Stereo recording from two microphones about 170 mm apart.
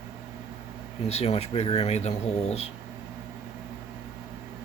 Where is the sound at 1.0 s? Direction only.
40° left (ahead or behind).